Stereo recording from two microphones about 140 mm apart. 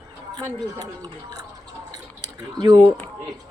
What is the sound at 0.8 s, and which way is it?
Speech, 30° right (ahead or behind).